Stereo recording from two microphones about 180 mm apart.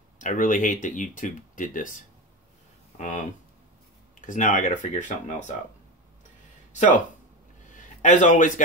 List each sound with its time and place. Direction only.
0.2 s speech: 45° left (ahead or behind)
6.7 s a man's voice: 45° left (ahead or behind)